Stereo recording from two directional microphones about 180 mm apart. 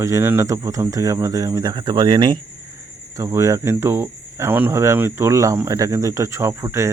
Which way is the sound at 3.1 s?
15° right (ahead or behind).